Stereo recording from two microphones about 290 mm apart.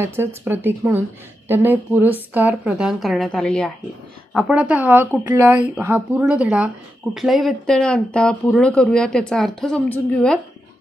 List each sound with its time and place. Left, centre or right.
0.0 s speech: centre